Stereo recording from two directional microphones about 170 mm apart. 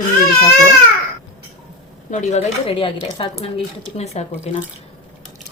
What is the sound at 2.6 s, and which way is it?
Speech, 35° left (ahead or behind).